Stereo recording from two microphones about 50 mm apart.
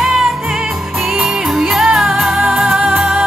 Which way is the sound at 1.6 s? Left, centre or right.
Centre.